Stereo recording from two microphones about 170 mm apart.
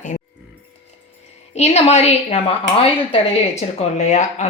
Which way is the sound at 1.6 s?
40° left (ahead or behind).